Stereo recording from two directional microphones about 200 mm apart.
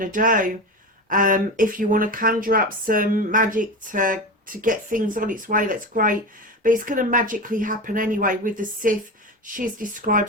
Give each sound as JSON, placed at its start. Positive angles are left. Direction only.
{"t": 0.0, "sound": "speech", "side_deg": -45}